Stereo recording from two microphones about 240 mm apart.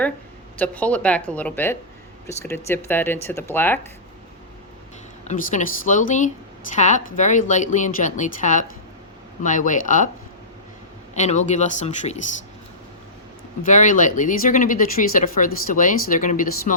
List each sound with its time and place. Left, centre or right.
0.6 s speech: centre
5.2 s a woman's voice: left
11.1 s speech: left
13.7 s a woman's voice: left